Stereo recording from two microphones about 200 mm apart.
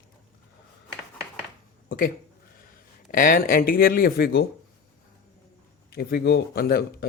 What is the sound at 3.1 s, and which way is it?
Speech, 45° left (ahead or behind).